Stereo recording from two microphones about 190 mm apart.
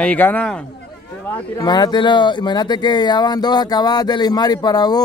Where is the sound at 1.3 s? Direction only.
20° left (ahead or behind).